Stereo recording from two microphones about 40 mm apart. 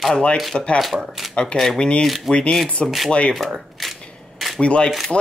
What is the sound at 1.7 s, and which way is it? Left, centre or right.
Speech, left.